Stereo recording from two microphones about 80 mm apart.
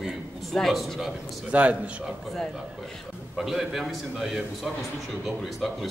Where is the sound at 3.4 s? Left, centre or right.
Centre.